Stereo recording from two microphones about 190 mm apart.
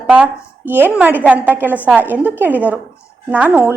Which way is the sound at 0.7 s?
10° right (ahead or behind).